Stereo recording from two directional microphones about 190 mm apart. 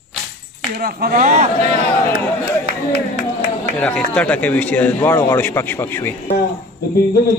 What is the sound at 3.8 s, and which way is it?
A man's voice, 5° left (ahead or behind).